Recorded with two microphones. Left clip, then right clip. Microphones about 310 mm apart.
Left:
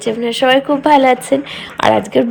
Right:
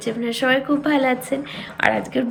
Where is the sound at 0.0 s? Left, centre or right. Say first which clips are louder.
Left 8 dB; centre.